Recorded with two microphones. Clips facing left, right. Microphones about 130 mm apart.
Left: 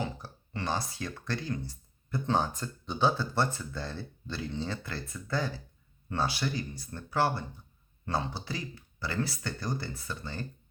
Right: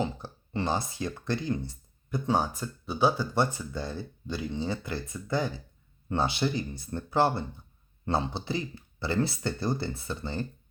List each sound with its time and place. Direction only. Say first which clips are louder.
0.0 s speech: right 4 dB; 25° right (ahead or behind)